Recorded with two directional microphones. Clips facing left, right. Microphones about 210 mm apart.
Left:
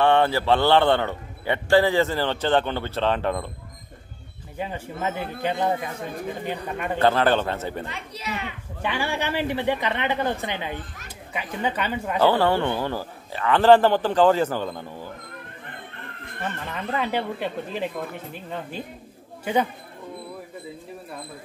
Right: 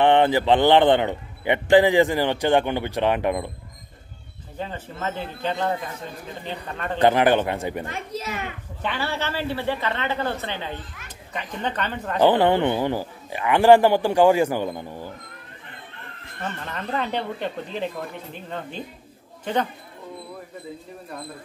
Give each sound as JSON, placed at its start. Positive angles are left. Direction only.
{"t": 0.0, "sound": "a man's voice", "side_deg": -20}
{"t": 4.6, "sound": "a man's voice", "side_deg": 10}
{"t": 7.0, "sound": "a man's voice", "side_deg": -15}
{"t": 7.8, "sound": "a child's voice", "side_deg": -45}
{"t": 8.8, "sound": "a man's voice", "side_deg": 10}
{"t": 12.2, "sound": "a man's voice", "side_deg": -15}
{"t": 16.3, "sound": "speech", "side_deg": 5}
{"t": 19.4, "sound": "a man's voice", "side_deg": 10}